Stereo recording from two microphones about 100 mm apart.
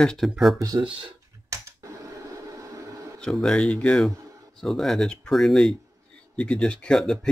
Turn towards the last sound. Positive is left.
turn(degrees=5)  # may be behind; listen again after turning